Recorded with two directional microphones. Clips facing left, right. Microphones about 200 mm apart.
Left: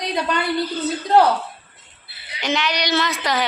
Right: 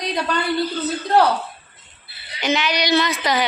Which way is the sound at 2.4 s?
Centre (ahead or behind).